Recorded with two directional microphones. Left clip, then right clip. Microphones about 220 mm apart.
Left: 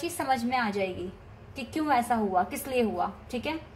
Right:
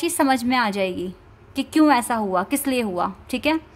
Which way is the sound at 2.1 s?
45° right (ahead or behind).